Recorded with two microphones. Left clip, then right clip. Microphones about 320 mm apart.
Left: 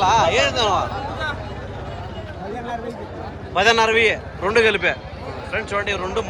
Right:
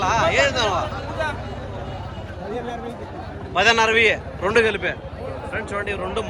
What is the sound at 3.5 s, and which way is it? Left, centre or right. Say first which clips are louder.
A man's voice: left 1 dB; centre.